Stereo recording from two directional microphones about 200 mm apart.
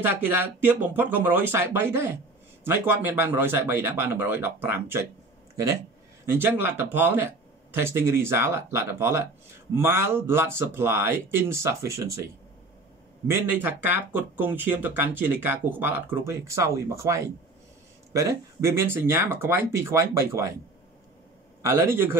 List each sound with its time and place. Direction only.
0.0 s speech: 10° right (ahead or behind)
6.2 s speech: 10° right (ahead or behind)
13.3 s speech: 10° right (ahead or behind)
21.6 s speech: 10° right (ahead or behind)